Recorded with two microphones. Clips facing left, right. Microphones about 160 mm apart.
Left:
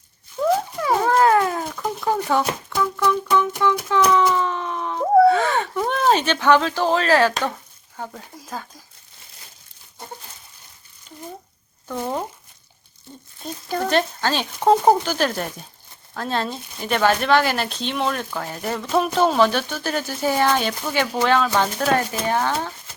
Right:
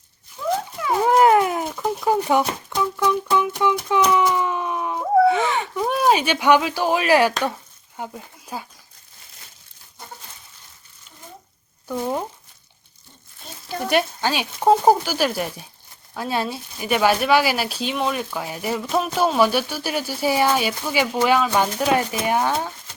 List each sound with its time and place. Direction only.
1.0 s cat: 20° right (ahead or behind)
2.0 s speech: 15° right (ahead or behind)
4.4 s a sound: 15° right (ahead or behind)
5.7 s speech: 5° right (ahead or behind)
11.9 s speech: 10° right (ahead or behind)
13.9 s speech: 10° right (ahead or behind)